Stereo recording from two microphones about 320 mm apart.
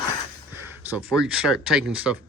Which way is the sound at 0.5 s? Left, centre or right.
Centre.